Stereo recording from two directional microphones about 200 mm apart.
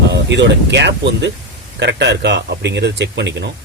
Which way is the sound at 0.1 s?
60° right (ahead or behind).